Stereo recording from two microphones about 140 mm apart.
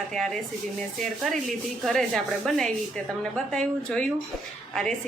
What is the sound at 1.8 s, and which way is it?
A woman's voice, centre (ahead or behind).